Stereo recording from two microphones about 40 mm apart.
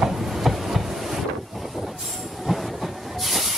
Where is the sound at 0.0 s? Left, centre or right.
Centre.